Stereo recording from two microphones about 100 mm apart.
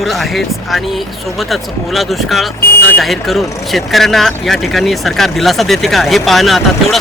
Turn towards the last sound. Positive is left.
turn(degrees=0)  # may be behind; listen again after turning